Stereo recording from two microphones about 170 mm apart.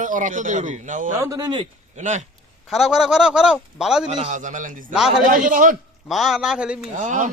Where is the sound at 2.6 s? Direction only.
Centre (ahead or behind).